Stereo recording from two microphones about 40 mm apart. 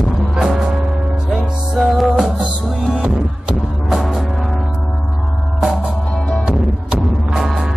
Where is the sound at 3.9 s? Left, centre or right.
Centre.